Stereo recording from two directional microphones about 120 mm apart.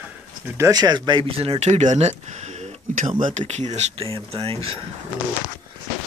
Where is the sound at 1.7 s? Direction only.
80° right.